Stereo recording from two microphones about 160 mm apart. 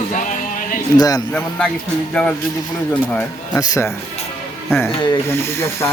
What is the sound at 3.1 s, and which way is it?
Speech, 10° left (ahead or behind).